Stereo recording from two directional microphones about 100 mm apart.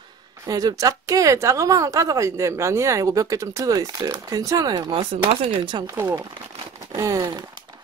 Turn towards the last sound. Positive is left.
turn(degrees=-30)  # may be behind; listen again after turning